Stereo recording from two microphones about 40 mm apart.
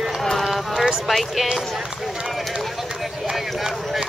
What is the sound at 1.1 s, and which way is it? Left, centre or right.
Speech, centre.